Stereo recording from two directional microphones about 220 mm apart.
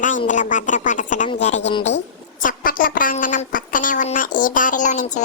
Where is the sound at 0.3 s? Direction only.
35° left (ahead or behind).